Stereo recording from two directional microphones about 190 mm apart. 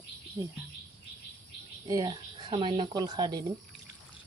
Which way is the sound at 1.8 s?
20° right (ahead or behind).